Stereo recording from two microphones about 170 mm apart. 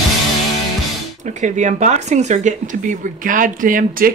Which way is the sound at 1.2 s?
45° right (ahead or behind).